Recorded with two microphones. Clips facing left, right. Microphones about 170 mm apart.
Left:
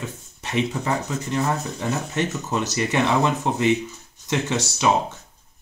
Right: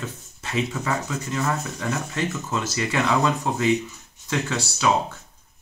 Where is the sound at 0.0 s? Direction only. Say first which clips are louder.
Left 1 dB; 20° left (ahead or behind).